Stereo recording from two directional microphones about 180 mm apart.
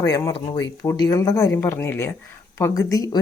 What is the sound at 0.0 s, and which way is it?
Speech, 20° left (ahead or behind).